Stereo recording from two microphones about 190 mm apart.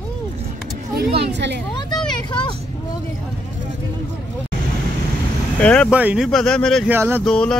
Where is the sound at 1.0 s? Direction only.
60° right (ahead or behind).